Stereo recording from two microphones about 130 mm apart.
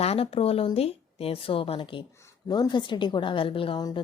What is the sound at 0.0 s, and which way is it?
A woman's voice, 50° left (ahead or behind).